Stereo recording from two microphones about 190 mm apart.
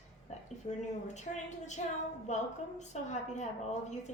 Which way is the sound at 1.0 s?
40° left (ahead or behind).